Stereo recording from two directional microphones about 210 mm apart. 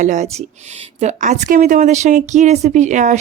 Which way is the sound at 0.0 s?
35° right (ahead or behind).